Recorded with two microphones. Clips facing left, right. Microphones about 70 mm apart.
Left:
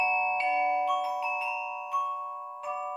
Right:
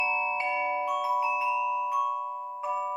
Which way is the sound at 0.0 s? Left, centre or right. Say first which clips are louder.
Left 1 dB; centre.